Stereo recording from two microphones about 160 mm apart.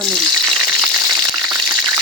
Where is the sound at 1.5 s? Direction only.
25° right (ahead or behind).